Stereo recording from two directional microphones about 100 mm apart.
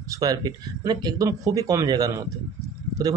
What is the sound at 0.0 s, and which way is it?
Speech, 35° right (ahead or behind).